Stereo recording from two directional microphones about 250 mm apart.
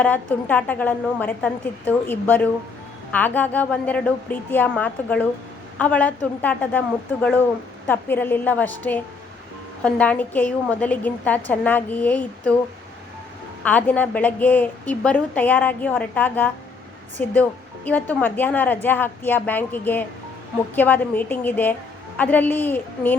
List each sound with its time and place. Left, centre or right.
0.0 s a woman's voice: centre
13.7 s a woman's voice: centre